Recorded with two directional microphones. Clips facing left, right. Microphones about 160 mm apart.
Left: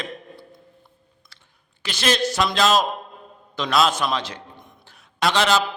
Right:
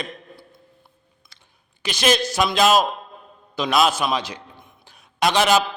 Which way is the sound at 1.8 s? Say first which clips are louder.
Right 2 dB; 15° right (ahead or behind).